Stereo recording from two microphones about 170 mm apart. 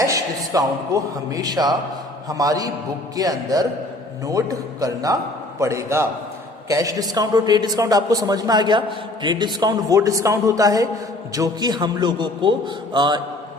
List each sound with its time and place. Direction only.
0.0 s a man's voice: 20° right (ahead or behind)